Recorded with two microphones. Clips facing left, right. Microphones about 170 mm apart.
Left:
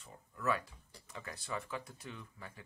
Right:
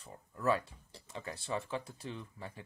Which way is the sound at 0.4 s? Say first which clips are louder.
Right 4 dB; 30° right (ahead or behind).